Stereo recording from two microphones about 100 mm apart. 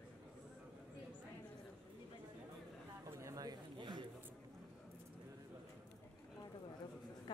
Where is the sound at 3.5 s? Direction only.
45° right (ahead or behind).